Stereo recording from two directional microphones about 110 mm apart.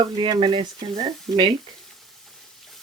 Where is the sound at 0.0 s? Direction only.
45° right (ahead or behind).